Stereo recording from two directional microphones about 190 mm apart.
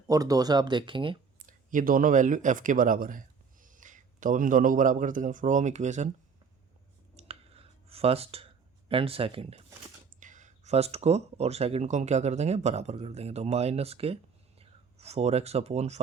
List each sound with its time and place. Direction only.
0.1 s speech: 20° right (ahead or behind)
1.5 s speech: 45° right (ahead or behind)
7.2 s clicking: 30° right (ahead or behind)
8.9 s speech: 30° right (ahead or behind)
10.2 s speech: 40° right (ahead or behind)